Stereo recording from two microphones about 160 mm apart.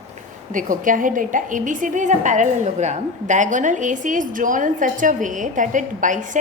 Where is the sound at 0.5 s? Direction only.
55° right (ahead or behind).